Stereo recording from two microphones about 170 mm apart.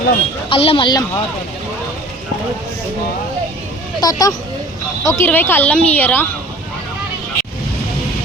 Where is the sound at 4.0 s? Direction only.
20° left (ahead or behind).